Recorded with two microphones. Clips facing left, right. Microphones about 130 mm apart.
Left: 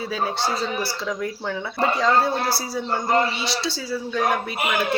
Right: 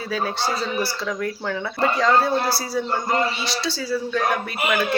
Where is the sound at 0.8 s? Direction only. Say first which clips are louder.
Right 1 dB; 20° left (ahead or behind).